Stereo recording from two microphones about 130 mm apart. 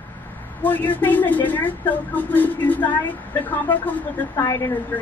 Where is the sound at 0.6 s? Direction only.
15° left (ahead or behind).